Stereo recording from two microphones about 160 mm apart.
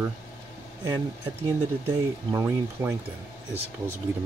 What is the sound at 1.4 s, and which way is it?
Speech, 20° right (ahead or behind).